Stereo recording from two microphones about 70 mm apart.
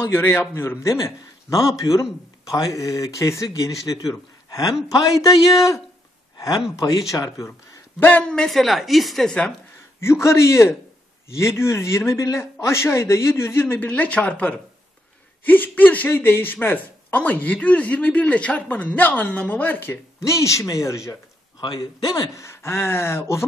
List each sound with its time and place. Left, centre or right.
0.0 s a man's voice: left
0.8 s a man's voice: left
7.1 s a man's voice: left
8.2 s a man's voice: centre
8.5 s a woman's voice: centre
9.9 s a man's voice: left
20.2 s a man's voice: left
21.5 s a man's voice: left
22.3 s a man's voice: left